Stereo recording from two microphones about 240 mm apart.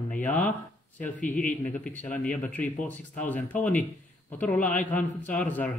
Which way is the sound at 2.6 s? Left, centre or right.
Left.